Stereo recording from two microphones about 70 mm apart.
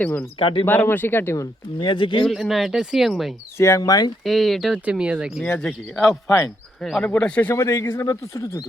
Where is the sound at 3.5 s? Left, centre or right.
Left.